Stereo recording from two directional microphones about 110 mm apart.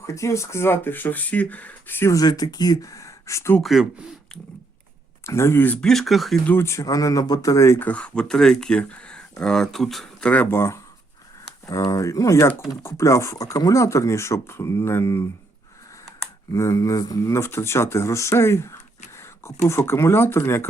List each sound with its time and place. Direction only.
0.0 s speech: 25° left (ahead or behind)
3.6 s speech: centre (ahead or behind)
5.2 s speech: 25° left (ahead or behind)
5.8 s speech: 5° left (ahead or behind)
6.4 s speech: 20° left (ahead or behind)
16.5 s speech: 30° left (ahead or behind)